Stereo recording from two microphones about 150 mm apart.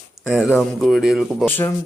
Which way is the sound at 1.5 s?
15° left (ahead or behind).